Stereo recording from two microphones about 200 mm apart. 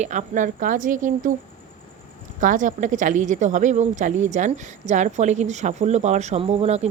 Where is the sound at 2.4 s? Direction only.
40° right (ahead or behind).